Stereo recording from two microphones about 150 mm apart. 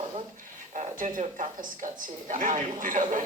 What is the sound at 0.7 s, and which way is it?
Speech, 60° right (ahead or behind).